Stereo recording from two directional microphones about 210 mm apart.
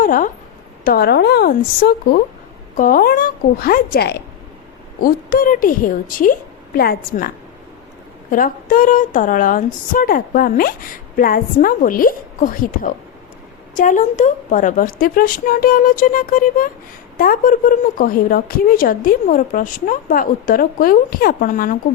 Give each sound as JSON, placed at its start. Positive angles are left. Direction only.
{"t": 0.0, "sound": "a woman's voice", "side_deg": 40}